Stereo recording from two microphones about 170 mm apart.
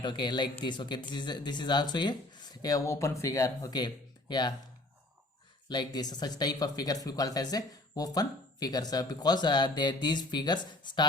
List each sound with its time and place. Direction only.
0.0 s speech: 25° left (ahead or behind)
5.6 s speech: 25° left (ahead or behind)